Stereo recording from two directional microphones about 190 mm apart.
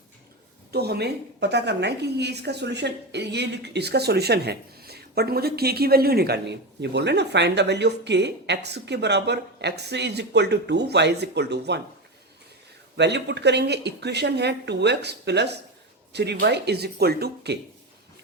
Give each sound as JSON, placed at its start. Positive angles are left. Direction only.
{"t": 0.7, "sound": "a woman's voice", "side_deg": -55}
{"t": 13.0, "sound": "a woman's voice", "side_deg": -65}